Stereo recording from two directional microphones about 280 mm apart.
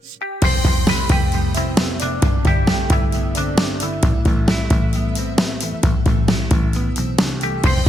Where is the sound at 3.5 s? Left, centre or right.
Centre.